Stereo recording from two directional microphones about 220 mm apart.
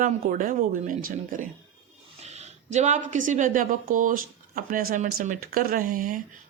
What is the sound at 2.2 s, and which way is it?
A woman's voice, 30° right (ahead or behind).